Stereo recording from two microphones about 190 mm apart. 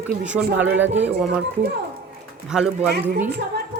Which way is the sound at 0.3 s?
5° right (ahead or behind).